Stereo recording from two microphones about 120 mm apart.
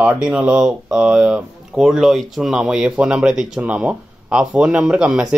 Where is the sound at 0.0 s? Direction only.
15° right (ahead or behind).